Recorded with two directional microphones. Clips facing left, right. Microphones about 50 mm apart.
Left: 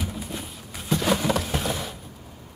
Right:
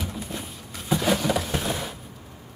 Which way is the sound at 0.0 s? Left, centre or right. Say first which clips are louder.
Even; centre.